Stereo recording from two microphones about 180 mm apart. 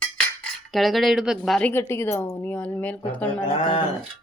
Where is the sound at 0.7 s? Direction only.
Centre (ahead or behind).